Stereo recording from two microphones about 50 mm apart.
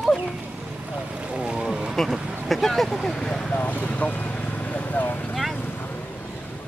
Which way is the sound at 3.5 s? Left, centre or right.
Left.